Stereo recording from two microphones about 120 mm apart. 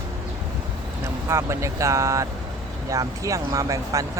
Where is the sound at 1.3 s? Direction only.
25° right (ahead or behind).